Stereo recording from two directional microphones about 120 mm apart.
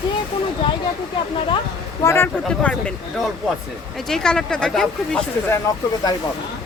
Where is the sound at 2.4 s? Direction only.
10° left (ahead or behind).